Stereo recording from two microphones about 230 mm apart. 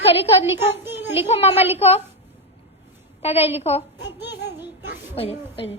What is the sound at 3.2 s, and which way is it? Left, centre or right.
Speech, left.